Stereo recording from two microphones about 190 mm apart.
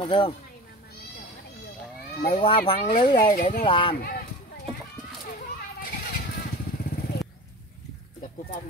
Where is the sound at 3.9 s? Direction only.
50° left (ahead or behind).